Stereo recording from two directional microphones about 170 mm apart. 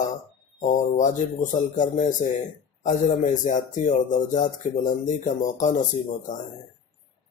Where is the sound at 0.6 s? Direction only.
45° left (ahead or behind).